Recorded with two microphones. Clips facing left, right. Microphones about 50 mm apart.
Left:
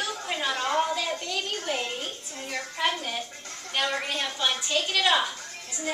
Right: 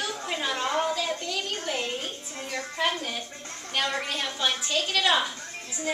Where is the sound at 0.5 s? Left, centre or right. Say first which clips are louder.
Left 1 dB; centre.